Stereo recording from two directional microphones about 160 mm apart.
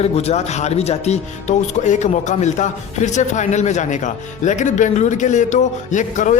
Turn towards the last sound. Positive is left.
turn(degrees=50)  # may be behind; listen again after turning